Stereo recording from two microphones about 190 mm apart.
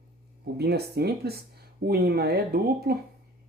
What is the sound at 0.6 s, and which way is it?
Speech, 60° right (ahead or behind).